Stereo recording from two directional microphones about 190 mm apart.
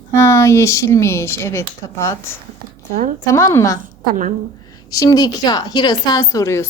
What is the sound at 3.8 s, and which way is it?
Speech, 45° right (ahead or behind).